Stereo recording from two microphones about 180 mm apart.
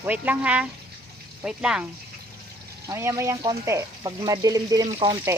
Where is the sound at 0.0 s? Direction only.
10° right (ahead or behind).